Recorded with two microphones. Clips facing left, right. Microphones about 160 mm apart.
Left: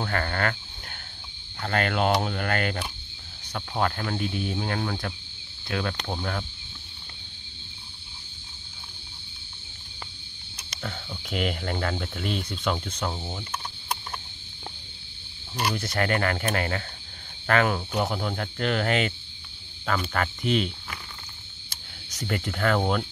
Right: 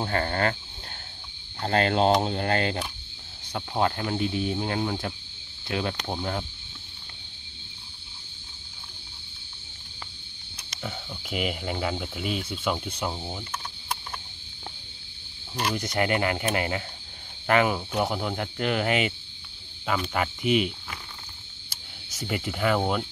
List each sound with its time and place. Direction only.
0.0 s speech: 30° right (ahead or behind)
1.6 s speech: 30° right (ahead or behind)
10.8 s speech: 10° right (ahead or behind)
13.5 s a sound: 15° left (ahead or behind)
15.7 s speech: 15° right (ahead or behind)
22.1 s speech: 5° right (ahead or behind)